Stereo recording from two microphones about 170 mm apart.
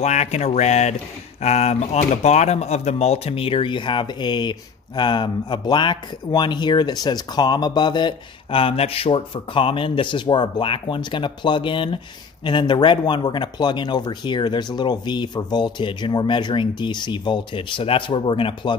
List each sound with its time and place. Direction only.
0.0 s speech: 40° left (ahead or behind)